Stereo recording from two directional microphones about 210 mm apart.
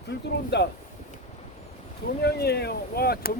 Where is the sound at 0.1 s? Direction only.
55° left (ahead or behind).